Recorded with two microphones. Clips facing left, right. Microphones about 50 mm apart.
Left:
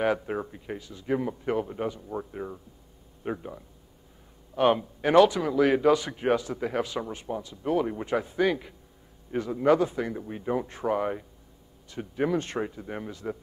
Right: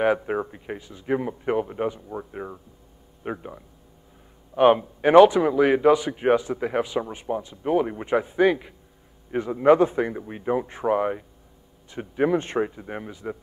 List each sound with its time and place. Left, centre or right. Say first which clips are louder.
0.0 s speech: right 4 dB; centre